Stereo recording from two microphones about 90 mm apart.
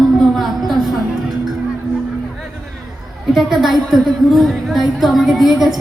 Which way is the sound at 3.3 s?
5° right (ahead or behind).